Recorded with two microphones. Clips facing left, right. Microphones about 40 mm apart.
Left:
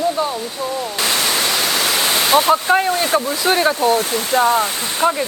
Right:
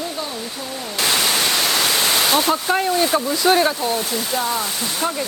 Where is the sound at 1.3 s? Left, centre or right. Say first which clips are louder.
Left 1 dB; centre.